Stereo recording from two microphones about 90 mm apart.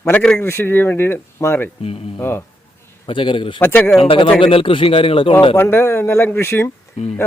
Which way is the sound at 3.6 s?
20° left (ahead or behind).